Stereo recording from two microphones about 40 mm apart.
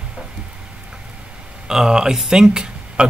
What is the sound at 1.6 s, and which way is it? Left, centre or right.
Speech, centre.